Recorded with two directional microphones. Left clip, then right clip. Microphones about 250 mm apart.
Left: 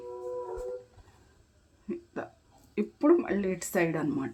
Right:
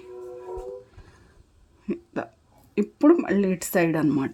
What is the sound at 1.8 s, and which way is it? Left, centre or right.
Hiccup, right.